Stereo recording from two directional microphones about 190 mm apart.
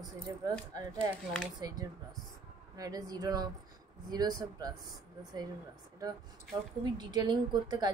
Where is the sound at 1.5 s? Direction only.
20° right (ahead or behind).